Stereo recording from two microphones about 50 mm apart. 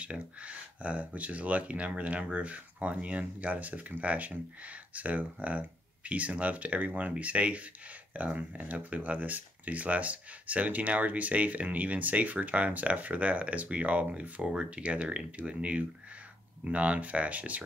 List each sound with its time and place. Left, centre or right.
0.0 s speech: right